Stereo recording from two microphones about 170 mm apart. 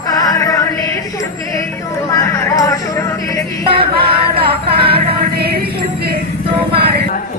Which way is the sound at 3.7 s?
65° right (ahead or behind).